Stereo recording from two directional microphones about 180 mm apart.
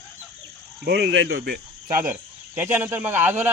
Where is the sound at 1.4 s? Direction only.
55° right (ahead or behind).